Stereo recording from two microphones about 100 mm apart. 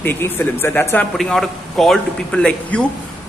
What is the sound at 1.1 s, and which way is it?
A man's voice, centre (ahead or behind).